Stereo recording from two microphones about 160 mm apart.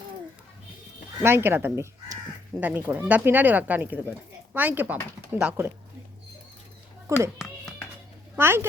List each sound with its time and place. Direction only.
1.2 s speech: 15° right (ahead or behind)
7.1 s speech: 15° right (ahead or behind)
8.4 s speech: 15° right (ahead or behind)